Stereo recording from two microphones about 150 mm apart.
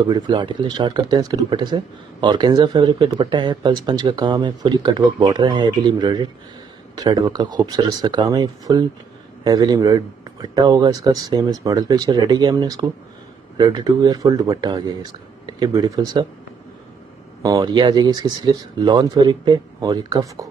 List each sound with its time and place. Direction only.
0.1 s speech: 30° right (ahead or behind)
17.4 s speech: 25° right (ahead or behind)